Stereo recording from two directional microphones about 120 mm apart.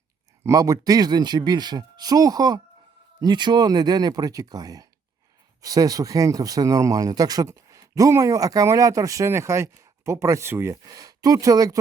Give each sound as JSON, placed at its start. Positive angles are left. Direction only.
{"t": 0.4, "sound": "speech", "side_deg": -30}